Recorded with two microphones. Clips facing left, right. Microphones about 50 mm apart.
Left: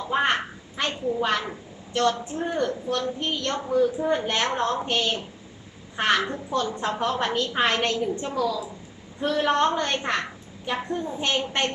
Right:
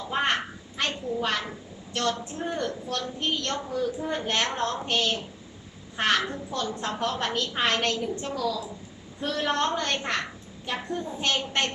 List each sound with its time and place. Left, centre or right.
0.0 s a woman's voice: left